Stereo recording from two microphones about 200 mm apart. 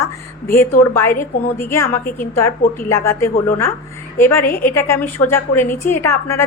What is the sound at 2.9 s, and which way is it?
A woman's voice, 15° left (ahead or behind).